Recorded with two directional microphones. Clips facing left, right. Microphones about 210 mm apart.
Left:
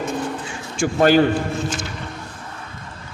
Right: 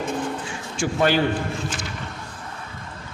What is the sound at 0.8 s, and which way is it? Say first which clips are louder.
Speech: left 5 dB; 45° left (ahead or behind).